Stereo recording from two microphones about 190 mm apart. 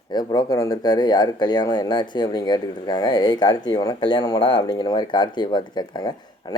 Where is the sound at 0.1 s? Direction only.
20° left (ahead or behind).